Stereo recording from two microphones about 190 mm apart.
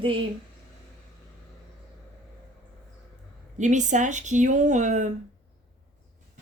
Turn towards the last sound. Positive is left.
turn(degrees=-40)  # may be behind; listen again after turning